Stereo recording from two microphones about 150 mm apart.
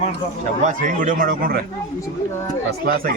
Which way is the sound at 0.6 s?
60° right (ahead or behind).